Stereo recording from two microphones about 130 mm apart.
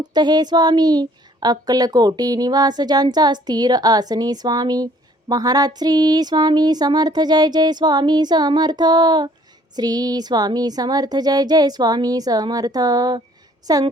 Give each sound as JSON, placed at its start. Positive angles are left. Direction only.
{"t": 0.0, "sound": "a woman's voice", "side_deg": -35}